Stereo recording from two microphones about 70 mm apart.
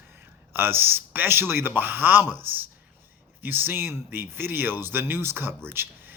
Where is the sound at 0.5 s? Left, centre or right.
Right.